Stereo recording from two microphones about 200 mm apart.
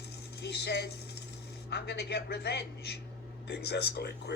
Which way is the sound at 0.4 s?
55° left (ahead or behind).